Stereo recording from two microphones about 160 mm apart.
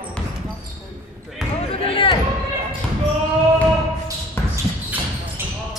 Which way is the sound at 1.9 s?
30° left (ahead or behind).